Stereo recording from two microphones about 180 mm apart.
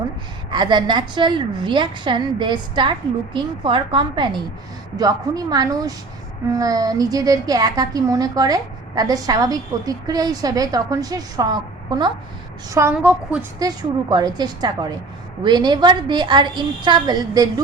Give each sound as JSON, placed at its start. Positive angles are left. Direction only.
{"t": 0.5, "sound": "a woman's voice", "side_deg": -25}
{"t": 12.9, "sound": "a woman's voice", "side_deg": -5}
{"t": 13.6, "sound": "a woman's voice", "side_deg": -20}